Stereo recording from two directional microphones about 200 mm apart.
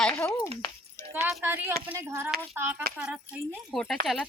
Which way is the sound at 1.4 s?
10° right (ahead or behind).